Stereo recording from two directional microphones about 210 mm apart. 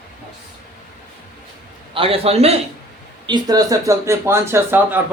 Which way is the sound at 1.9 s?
25° right (ahead or behind).